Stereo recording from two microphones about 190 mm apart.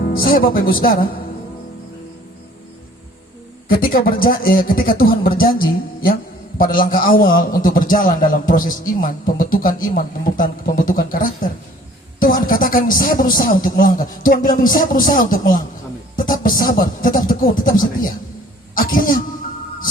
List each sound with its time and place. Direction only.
0.0 s speech: 50° left (ahead or behind)
3.7 s a man's voice: 50° left (ahead or behind)
6.6 s a man's voice: 50° left (ahead or behind)